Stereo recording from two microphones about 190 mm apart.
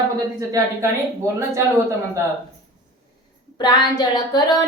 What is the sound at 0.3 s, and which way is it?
Speech, 15° right (ahead or behind).